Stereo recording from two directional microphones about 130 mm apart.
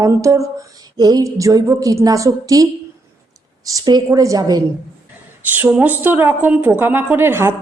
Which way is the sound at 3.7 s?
30° right (ahead or behind).